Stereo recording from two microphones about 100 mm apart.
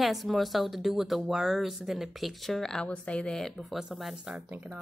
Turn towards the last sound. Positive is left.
turn(degrees=-15)  # may be behind; listen again after turning